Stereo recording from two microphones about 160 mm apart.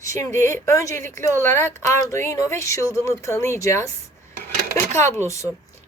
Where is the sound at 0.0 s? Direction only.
20° left (ahead or behind).